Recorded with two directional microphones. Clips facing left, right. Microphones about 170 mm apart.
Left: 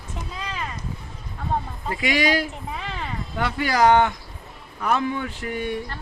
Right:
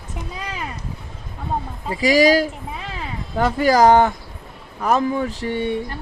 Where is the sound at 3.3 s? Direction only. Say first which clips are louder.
Right 8 dB; 40° right (ahead or behind).